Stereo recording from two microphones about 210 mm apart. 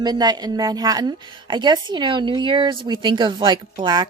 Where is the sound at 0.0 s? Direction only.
20° right (ahead or behind).